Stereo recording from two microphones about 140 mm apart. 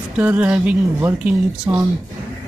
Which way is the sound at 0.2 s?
10° right (ahead or behind).